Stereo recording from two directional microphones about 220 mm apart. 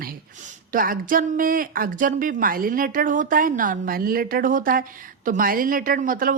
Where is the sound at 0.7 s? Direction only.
40° right (ahead or behind).